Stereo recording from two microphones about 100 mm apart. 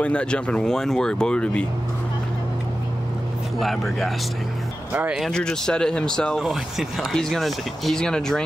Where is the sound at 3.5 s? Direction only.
Centre (ahead or behind).